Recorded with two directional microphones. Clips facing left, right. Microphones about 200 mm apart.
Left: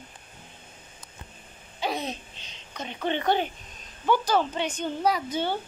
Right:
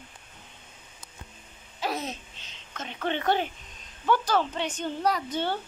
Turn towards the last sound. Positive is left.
turn(degrees=5)  # may be behind; listen again after turning